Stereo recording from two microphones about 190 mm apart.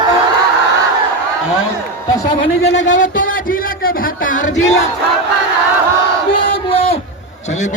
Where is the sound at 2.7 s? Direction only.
70° left (ahead or behind).